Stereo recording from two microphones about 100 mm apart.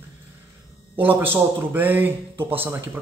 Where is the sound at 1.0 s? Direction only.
20° right (ahead or behind).